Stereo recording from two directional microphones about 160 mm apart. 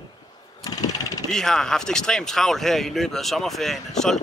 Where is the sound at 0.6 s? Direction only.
25° left (ahead or behind).